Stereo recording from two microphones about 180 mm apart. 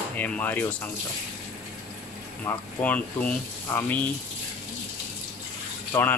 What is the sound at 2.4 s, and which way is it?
Speech, 10° left (ahead or behind).